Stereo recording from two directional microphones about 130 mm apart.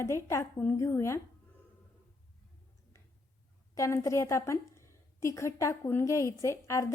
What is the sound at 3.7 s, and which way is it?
Speech, 25° left (ahead or behind).